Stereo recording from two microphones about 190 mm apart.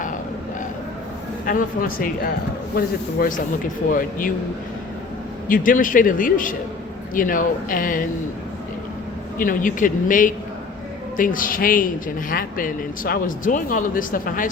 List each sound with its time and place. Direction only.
1.5 s a woman's voice: 45° left (ahead or behind)
5.5 s a woman's voice: 45° left (ahead or behind)
9.4 s a woman's voice: 45° left (ahead or behind)